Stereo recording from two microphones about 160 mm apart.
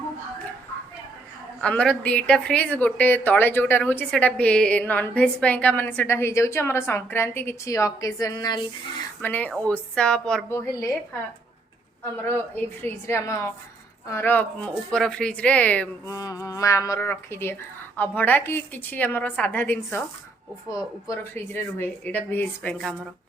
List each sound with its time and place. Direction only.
1.6 s a woman's voice: 5° left (ahead or behind); by 8.6 s 25° left (ahead or behind)
9.2 s a woman's voice: 10° left (ahead or behind)
10.5 s a woman's voice: 15° left (ahead or behind)
12.2 s a woman's voice: 10° left (ahead or behind)
16.1 s a woman's voice: 20° left (ahead or behind)